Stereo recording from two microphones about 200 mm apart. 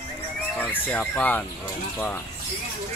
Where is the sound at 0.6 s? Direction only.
10° left (ahead or behind).